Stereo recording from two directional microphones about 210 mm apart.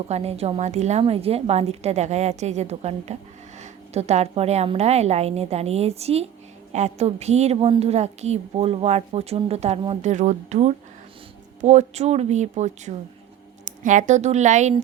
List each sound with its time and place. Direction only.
0.1 s a woman's voice: 30° right (ahead or behind)